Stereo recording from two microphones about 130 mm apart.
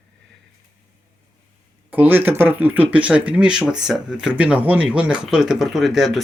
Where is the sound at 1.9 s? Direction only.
15° right (ahead or behind).